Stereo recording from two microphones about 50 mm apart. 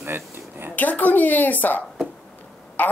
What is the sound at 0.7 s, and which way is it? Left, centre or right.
Speech, left.